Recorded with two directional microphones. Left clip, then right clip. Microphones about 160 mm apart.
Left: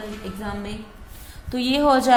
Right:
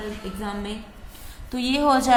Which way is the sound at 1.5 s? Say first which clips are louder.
Left 2 dB; 25° left (ahead or behind).